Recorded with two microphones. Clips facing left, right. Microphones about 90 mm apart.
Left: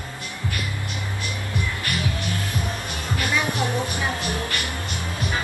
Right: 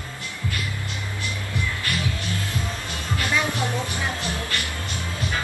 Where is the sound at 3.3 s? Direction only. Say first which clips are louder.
Even; 15° left (ahead or behind).